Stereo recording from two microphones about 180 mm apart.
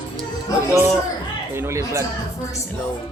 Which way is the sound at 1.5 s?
15° right (ahead or behind).